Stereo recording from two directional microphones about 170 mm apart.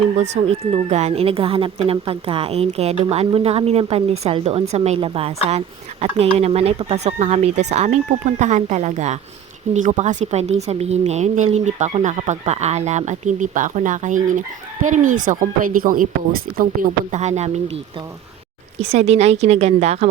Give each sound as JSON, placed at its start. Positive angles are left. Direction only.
{"t": 0.2, "sound": "speech", "side_deg": -35}
{"t": 17.1, "sound": "speech", "side_deg": -40}
{"t": 18.8, "sound": "speech", "side_deg": -40}